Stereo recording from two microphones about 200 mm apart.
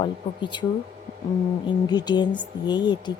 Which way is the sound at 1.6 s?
20° left (ahead or behind).